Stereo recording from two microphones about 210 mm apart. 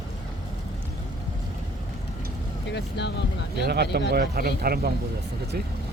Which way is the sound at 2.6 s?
55° left (ahead or behind).